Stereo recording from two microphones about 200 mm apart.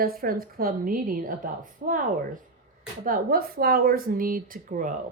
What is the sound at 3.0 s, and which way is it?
A woman's voice, 45° right (ahead or behind).